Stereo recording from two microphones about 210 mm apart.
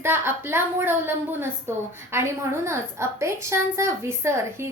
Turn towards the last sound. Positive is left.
turn(degrees=-10)  # may be behind; listen again after turning